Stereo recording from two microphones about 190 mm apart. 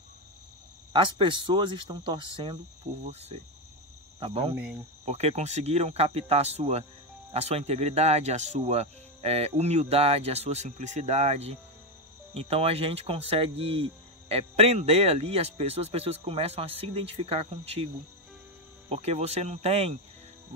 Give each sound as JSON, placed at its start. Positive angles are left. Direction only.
{"t": 0.9, "sound": "cricket", "side_deg": -25}
{"t": 3.1, "sound": "speech", "side_deg": -35}
{"t": 18.9, "sound": "speech", "side_deg": -35}